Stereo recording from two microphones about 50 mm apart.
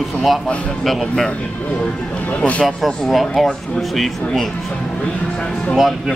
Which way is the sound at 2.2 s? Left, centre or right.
Left.